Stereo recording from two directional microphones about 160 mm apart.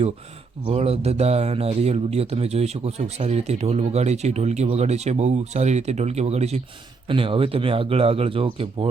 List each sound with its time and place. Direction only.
0.7 s speech: 40° right (ahead or behind)